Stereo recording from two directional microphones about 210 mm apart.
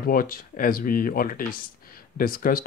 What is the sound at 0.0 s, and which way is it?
Speech, 45° left (ahead or behind).